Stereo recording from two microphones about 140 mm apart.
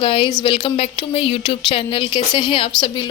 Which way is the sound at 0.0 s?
40° left (ahead or behind).